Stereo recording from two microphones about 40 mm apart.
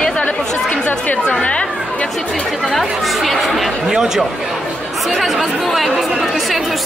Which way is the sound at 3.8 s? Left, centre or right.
Centre.